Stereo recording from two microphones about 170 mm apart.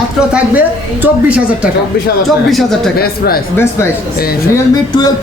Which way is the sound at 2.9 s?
65° left (ahead or behind).